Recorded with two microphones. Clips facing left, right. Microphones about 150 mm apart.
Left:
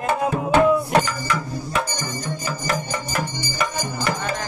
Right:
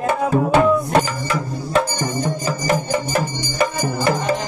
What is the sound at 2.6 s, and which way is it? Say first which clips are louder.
Music: right 8 dB; 25° right (ahead or behind).